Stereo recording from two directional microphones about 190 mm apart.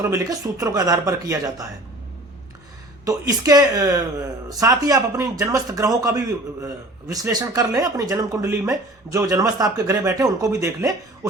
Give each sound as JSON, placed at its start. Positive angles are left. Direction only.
{"t": 0.0, "sound": "speech", "side_deg": -15}
{"t": 3.1, "sound": "speech", "side_deg": -20}